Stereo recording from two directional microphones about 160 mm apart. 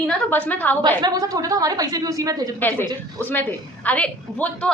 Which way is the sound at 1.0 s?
25° right (ahead or behind).